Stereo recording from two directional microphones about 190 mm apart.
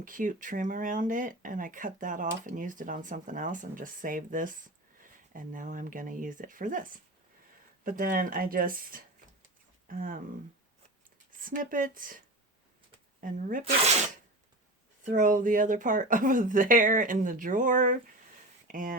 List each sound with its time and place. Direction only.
0.0 s speech: 45° right (ahead or behind)
11.3 s speech: 45° right (ahead or behind)
13.2 s speech: 45° right (ahead or behind)
15.1 s speech: 45° right (ahead or behind)